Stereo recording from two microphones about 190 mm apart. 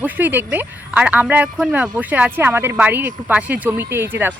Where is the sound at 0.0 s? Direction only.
10° right (ahead or behind).